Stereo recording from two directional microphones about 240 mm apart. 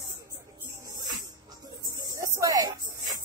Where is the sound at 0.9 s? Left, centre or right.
Centre.